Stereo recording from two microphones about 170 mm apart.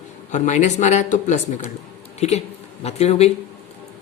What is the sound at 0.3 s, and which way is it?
Speech, 45° left (ahead or behind).